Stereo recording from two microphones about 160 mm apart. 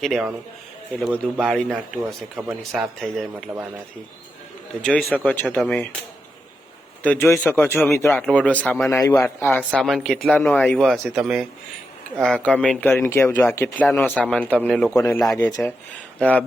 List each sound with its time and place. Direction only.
0.0 s speech: centre (ahead or behind)
3.3 s speech: 10° right (ahead or behind)
4.8 s speech: 5° left (ahead or behind)
7.0 s speech: 10° left (ahead or behind)
15.2 s speech: 5° left (ahead or behind)